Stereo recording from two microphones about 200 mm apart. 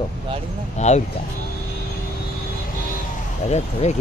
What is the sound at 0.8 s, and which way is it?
Speech, 35° left (ahead or behind).